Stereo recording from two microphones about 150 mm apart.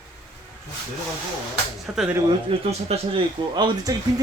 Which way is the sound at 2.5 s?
35° right (ahead or behind).